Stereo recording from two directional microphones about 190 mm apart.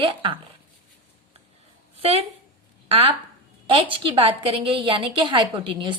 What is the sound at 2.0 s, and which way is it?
A woman's voice, 30° right (ahead or behind).